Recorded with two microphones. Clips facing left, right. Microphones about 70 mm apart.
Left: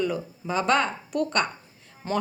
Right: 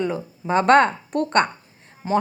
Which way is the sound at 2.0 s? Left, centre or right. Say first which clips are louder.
Right 6 dB; centre.